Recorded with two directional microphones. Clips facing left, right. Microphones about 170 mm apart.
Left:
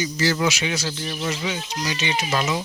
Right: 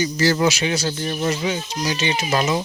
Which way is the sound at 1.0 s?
45° right (ahead or behind).